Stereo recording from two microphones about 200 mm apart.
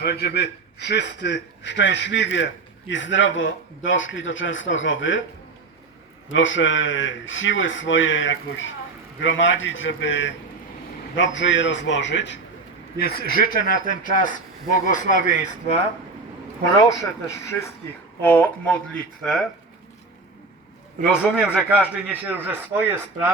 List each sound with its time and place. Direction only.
0.0 s a man's voice: 55° left (ahead or behind); by 5.2 s 70° left (ahead or behind)
6.2 s a man's voice: 70° left (ahead or behind)
13.0 s speech: 50° left (ahead or behind)
16.8 s speech: 15° left (ahead or behind)
21.1 s a man's voice: 5° right (ahead or behind)